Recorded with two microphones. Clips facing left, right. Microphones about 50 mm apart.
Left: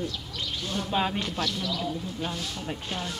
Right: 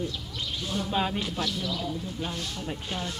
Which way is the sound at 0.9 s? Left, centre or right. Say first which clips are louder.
Left 1 dB; centre.